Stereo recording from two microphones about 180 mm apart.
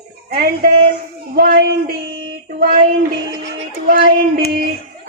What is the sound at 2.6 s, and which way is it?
A woman's voice, 55° right (ahead or behind).